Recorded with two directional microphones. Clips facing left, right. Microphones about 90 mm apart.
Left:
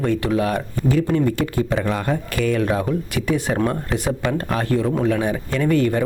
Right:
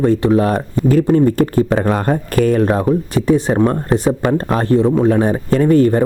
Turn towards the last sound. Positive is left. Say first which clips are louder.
# right 7 dB
turn(degrees=-35)  # may be behind; listen again after turning